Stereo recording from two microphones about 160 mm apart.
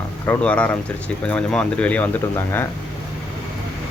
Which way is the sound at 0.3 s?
10° left (ahead or behind).